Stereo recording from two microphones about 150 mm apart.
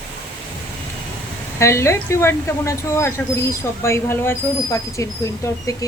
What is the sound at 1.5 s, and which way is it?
Speech, 20° left (ahead or behind).